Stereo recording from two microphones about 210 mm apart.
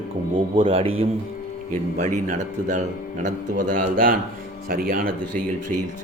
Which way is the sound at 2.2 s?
35° right (ahead or behind).